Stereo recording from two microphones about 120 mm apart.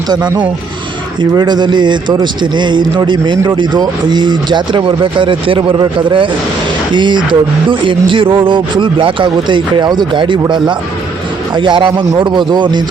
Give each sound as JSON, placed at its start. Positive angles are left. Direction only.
{"t": 1.2, "sound": "speech", "side_deg": -40}
{"t": 11.5, "sound": "speech", "side_deg": -40}